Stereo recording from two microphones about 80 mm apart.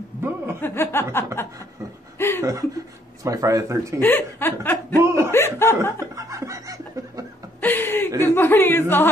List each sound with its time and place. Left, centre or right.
0.6 s speech: left
2.1 s chuckle: left
3.3 s speech: right
4.0 s speech: left
5.0 s chuckle: right
5.3 s speech: left
5.9 s chuckle: right
7.6 s chuckle: left
8.2 s speech: left